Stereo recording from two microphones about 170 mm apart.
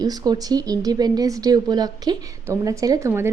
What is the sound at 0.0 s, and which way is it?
Speech, 25° right (ahead or behind).